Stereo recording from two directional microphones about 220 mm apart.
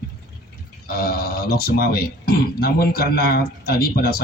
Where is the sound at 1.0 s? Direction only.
45° left (ahead or behind).